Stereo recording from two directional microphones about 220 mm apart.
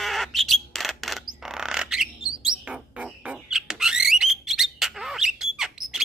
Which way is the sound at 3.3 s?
5° right (ahead or behind).